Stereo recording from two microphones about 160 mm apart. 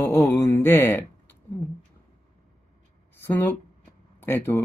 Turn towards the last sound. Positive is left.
turn(degrees=15)  # may be behind; listen again after turning